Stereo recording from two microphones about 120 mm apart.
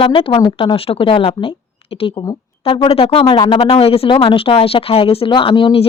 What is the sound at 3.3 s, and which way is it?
Speech, 35° left (ahead or behind).